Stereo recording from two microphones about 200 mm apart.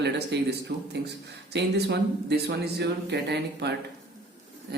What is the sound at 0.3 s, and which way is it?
Speech, 60° right (ahead or behind).